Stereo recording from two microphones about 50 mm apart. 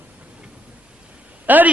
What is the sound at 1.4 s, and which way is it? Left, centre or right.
Speech, right.